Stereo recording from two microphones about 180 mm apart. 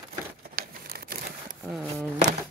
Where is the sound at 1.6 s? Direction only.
10° right (ahead or behind).